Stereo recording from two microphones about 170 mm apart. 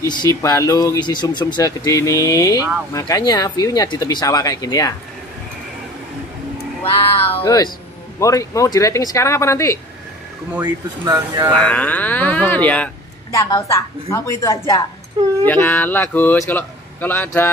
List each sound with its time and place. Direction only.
0.1 s speech: 20° left (ahead or behind)
7.3 s speech: 20° left (ahead or behind)
10.6 s speech: 20° right (ahead or behind)
11.5 s speech: 10° left (ahead or behind)